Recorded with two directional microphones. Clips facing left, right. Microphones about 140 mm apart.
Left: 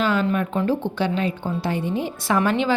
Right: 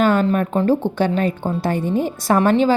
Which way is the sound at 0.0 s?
50° right (ahead or behind).